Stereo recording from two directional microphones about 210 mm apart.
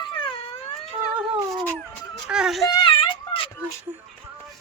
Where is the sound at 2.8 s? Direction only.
20° left (ahead or behind).